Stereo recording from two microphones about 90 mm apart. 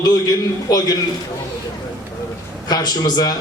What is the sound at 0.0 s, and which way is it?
Speech, 45° left (ahead or behind).